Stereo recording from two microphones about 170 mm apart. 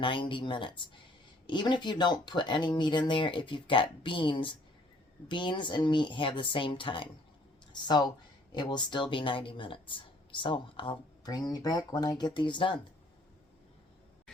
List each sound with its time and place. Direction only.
0.0 s speech: 30° left (ahead or behind)